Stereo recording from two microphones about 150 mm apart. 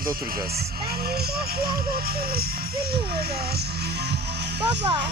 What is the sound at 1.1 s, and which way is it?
Music, 90° right.